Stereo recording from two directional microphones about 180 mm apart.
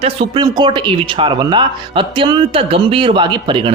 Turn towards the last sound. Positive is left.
turn(degrees=-30)  # may be behind; listen again after turning